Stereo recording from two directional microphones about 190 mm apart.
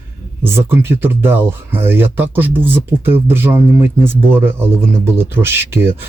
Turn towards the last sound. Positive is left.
turn(degrees=-10)  # may be behind; listen again after turning